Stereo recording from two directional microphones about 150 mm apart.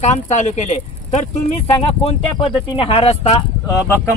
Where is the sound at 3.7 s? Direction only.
20° left (ahead or behind).